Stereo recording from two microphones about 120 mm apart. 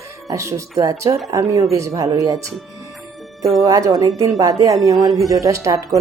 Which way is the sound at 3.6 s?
30° right (ahead or behind).